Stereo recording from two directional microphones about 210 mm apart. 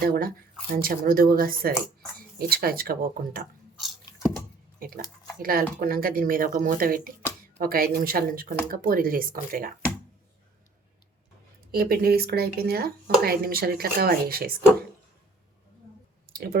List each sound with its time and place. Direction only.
0.0 s speech: 45° right (ahead or behind)
4.8 s speech: 45° right (ahead or behind)
11.7 s speech: 45° right (ahead or behind)
16.3 s clicking: 50° right (ahead or behind)